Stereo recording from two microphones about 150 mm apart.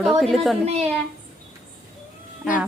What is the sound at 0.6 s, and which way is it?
Speech, 40° right (ahead or behind).